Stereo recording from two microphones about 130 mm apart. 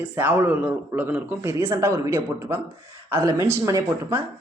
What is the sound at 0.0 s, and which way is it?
Speech, 15° right (ahead or behind).